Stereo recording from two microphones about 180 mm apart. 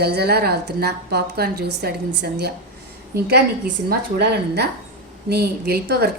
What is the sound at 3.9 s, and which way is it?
A woman's voice, 70° right (ahead or behind).